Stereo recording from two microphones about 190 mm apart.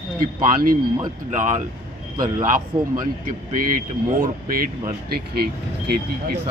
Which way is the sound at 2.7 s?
25° right (ahead or behind).